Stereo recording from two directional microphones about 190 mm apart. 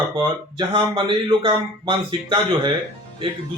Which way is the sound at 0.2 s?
25° right (ahead or behind).